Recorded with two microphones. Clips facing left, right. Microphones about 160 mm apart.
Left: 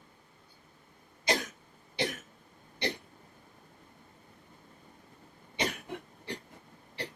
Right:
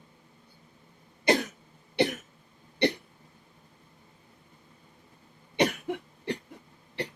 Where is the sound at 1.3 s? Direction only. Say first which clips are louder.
Right 7 dB; 65° right (ahead or behind).